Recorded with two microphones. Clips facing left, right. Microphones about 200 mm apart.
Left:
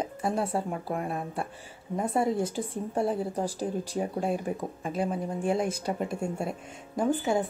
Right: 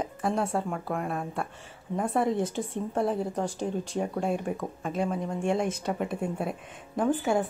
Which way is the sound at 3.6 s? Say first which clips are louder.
Even; 5° left (ahead or behind).